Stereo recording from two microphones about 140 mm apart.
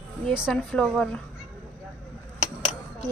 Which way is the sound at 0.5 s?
5° left (ahead or behind).